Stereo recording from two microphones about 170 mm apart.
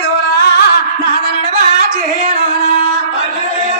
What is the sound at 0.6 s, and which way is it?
Music, 90° left.